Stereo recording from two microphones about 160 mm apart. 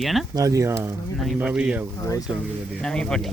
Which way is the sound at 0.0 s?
Centre (ahead or behind).